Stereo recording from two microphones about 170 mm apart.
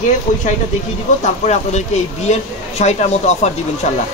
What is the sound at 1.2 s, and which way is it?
A man's voice, 40° left (ahead or behind).